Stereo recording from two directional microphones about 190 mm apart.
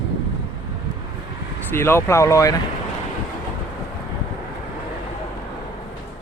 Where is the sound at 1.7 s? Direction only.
15° left (ahead or behind).